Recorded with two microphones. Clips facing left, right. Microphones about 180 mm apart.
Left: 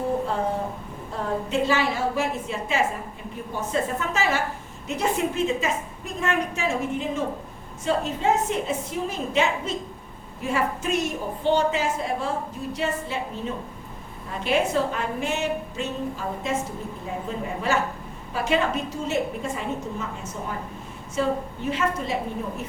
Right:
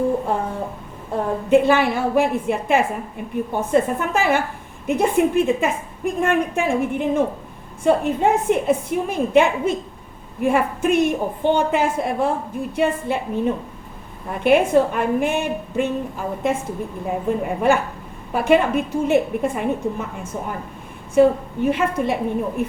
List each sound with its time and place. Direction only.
1.5 s a woman's voice: 55° right (ahead or behind)
21.2 s a woman's voice: 55° right (ahead or behind)